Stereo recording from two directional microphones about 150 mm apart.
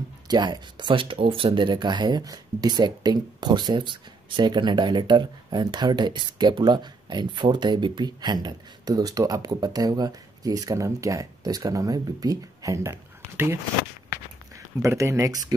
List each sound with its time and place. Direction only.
0.3 s speech: 30° right (ahead or behind)
14.8 s speech: 20° right (ahead or behind)